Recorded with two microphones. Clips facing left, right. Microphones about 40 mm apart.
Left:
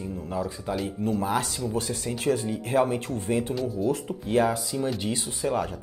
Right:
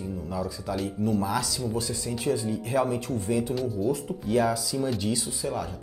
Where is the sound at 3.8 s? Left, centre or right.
Left.